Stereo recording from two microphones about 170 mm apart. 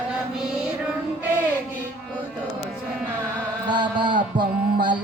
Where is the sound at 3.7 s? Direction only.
30° right (ahead or behind).